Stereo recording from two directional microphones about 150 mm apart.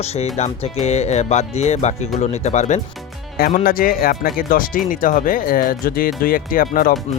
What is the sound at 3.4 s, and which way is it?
Speech, 80° left.